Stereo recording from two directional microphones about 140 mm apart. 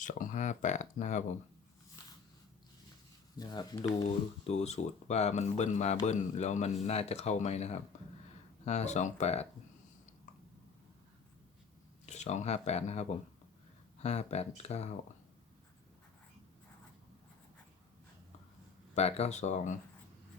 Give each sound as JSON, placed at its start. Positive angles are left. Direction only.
{"t": 0.0, "sound": "speech", "side_deg": 70}
{"t": 3.3, "sound": "speech", "side_deg": 30}
{"t": 4.4, "sound": "speech", "side_deg": 50}
{"t": 12.0, "sound": "speech", "side_deg": 55}
{"t": 18.9, "sound": "speech", "side_deg": 50}